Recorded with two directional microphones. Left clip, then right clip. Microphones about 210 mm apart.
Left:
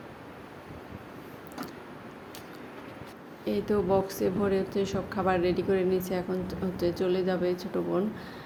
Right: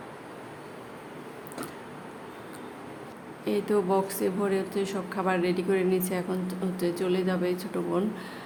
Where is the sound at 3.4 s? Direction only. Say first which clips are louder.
Right 1 dB; 10° left (ahead or behind).